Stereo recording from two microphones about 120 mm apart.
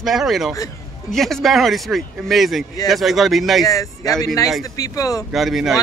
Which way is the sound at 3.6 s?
30° left (ahead or behind).